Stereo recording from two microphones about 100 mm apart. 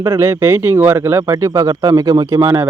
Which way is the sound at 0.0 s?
30° right (ahead or behind).